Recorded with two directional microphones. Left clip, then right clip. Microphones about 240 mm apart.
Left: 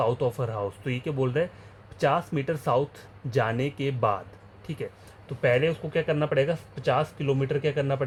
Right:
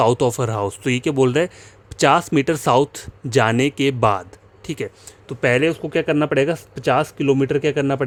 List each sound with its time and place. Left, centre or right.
0.0 s speech: right